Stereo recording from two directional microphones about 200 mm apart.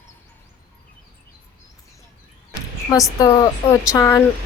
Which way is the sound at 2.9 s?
20° left (ahead or behind).